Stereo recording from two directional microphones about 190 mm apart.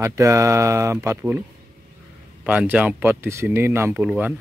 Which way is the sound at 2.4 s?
10° right (ahead or behind).